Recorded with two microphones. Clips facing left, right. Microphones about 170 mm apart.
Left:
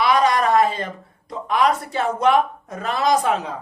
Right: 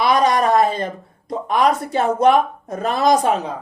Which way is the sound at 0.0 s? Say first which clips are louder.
Right 2 dB; 40° right (ahead or behind).